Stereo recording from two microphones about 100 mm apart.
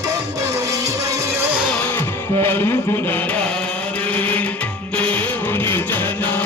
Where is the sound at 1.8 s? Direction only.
20° left (ahead or behind).